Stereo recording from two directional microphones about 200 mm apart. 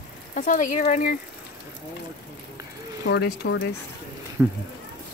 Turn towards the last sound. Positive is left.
turn(degrees=-5)  # may be behind; listen again after turning